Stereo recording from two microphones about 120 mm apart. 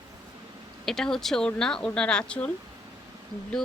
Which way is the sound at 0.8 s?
5° left (ahead or behind).